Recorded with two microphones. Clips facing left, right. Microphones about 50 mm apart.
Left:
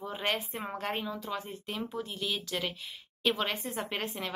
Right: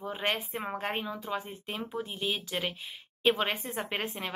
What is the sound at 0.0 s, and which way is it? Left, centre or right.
A woman's voice, centre.